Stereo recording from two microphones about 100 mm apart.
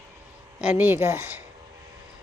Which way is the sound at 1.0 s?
30° right (ahead or behind).